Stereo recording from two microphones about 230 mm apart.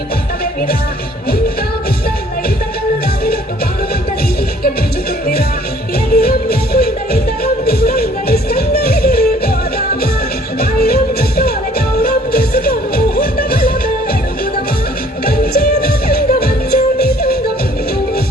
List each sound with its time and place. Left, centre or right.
6.1 s music: left
10.6 s music: left
15.5 s music: left